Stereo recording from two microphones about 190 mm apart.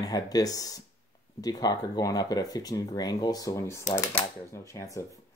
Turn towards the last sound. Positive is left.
turn(degrees=15)  # may be behind; listen again after turning